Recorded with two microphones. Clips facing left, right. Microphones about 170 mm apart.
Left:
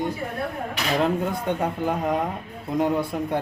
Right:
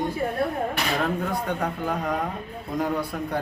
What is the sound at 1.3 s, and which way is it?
Speech, 20° left (ahead or behind).